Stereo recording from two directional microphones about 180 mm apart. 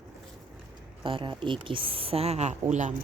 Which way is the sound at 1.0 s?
30° right (ahead or behind).